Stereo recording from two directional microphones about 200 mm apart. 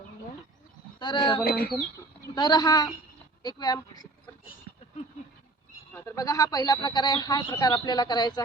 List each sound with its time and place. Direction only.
0.9 s speech: 25° left (ahead or behind)
1.5 s speech: 50° left (ahead or behind)
2.2 s speech: 20° left (ahead or behind)
5.9 s speech: 15° left (ahead or behind)